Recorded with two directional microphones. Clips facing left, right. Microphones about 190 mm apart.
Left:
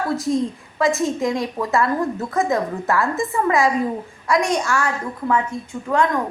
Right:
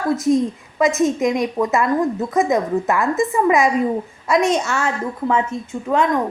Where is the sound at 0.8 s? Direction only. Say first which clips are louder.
Right 3 dB; 20° right (ahead or behind).